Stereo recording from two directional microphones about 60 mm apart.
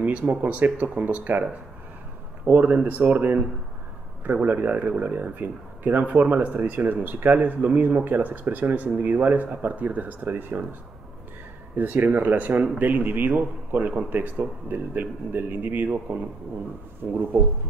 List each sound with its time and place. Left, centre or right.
0.0 s speech: right
11.7 s speech: right